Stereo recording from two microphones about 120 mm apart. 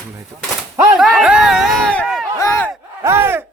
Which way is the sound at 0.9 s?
5° right (ahead or behind).